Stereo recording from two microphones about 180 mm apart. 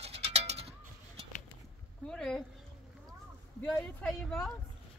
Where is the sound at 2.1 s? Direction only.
5° left (ahead or behind).